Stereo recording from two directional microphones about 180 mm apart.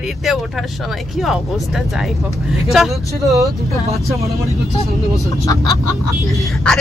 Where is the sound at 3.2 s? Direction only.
15° right (ahead or behind).